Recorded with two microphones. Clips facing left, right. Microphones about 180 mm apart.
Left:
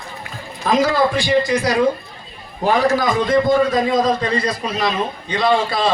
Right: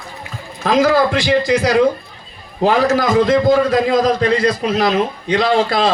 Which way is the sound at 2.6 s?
80° right.